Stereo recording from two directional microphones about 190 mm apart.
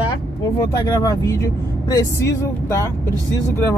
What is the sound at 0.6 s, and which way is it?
Speech, 20° left (ahead or behind).